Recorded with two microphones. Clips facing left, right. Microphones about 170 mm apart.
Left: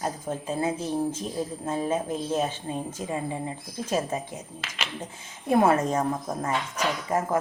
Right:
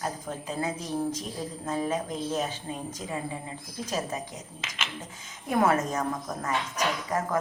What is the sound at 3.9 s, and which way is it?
Speech, 30° left (ahead or behind).